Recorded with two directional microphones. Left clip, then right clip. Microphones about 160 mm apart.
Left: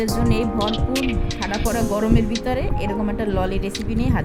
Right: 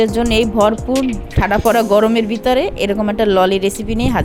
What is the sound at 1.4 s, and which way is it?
Speech, 50° right (ahead or behind).